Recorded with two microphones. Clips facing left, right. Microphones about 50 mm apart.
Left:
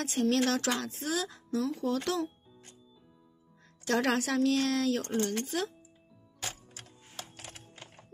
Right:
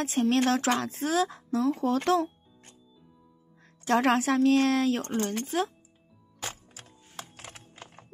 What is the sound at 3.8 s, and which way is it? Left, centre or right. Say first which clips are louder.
Speech: right 5 dB; right.